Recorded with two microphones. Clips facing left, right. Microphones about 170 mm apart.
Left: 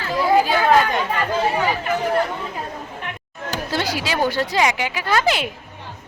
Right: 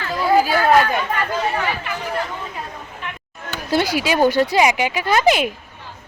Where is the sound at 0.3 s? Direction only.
5° right (ahead or behind).